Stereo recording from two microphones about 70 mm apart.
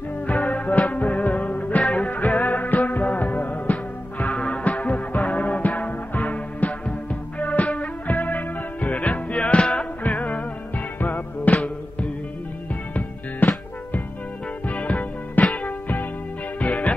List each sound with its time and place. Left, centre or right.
0.3 s music: centre
13.4 s music: left
14.7 s music: left